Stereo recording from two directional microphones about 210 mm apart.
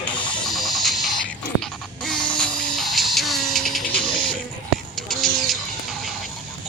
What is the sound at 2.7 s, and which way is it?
Music, centre (ahead or behind).